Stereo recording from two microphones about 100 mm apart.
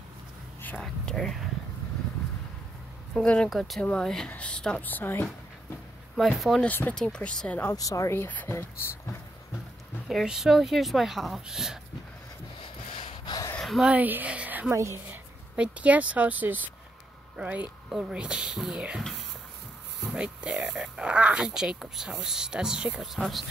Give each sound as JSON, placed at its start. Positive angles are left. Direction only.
{"t": 0.7, "sound": "a woman's voice", "side_deg": 5}
{"t": 3.4, "sound": "a woman's voice", "side_deg": 0}
{"t": 6.1, "sound": "a woman's voice", "side_deg": 0}
{"t": 6.6, "sound": "speech", "side_deg": 15}
{"t": 7.7, "sound": "speech", "side_deg": 35}
{"t": 10.0, "sound": "a woman's voice", "side_deg": -5}
{"t": 12.6, "sound": "snort", "side_deg": 60}
{"t": 13.6, "sound": "a sound", "side_deg": 0}
{"t": 13.8, "sound": "speech", "side_deg": -15}
{"t": 14.7, "sound": "a woman's voice", "side_deg": -30}
{"t": 15.5, "sound": "speech", "side_deg": -15}
{"t": 20.1, "sound": "speech", "side_deg": -10}